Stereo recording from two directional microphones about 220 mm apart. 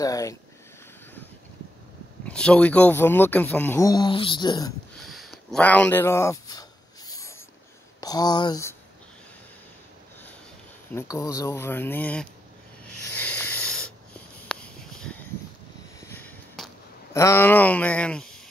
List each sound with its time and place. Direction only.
0.0 s speech: 15° left (ahead or behind)
2.2 s speech: 5° left (ahead or behind)
5.0 s a sound: centre (ahead or behind)
8.0 s speech: 15° left (ahead or behind)
10.9 s speech: 10° left (ahead or behind)
13.2 s wheeze: 10° left (ahead or behind)
16.0 s a sound: 10° left (ahead or behind)
17.1 s speech: 15° left (ahead or behind)